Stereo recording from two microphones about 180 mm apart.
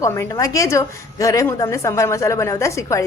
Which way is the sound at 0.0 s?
15° left (ahead or behind).